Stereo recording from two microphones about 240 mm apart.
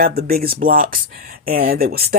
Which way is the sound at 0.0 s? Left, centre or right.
Right.